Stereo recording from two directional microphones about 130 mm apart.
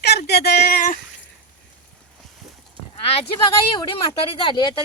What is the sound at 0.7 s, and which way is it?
Speech, 90° left.